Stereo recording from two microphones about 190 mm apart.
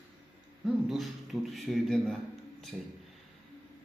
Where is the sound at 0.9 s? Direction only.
Centre (ahead or behind).